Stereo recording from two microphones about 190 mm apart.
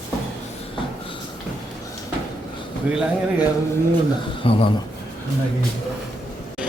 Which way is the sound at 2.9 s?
5° right (ahead or behind).